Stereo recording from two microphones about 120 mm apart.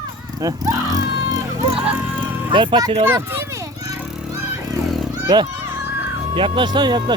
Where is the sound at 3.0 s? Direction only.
20° right (ahead or behind).